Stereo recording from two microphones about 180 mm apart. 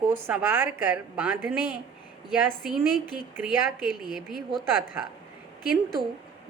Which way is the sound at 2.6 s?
5° right (ahead or behind).